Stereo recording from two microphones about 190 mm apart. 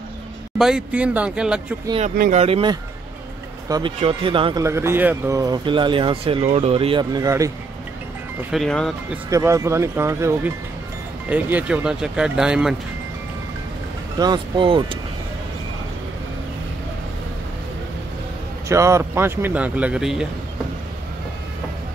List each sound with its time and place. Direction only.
0.6 s speech: 5° right (ahead or behind)
2.3 s speech: 30° right (ahead or behind)
4.6 s speech: 15° right (ahead or behind)
8.5 s speech: centre (ahead or behind)
9.3 s speech: 15° right (ahead or behind)
14.1 s speech: 20° right (ahead or behind)
18.7 s speech: 15° right (ahead or behind)